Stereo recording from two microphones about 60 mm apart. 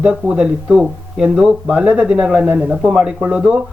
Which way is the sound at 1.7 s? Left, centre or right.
Right.